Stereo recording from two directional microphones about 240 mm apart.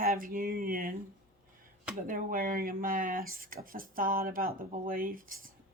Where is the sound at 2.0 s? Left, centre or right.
Right.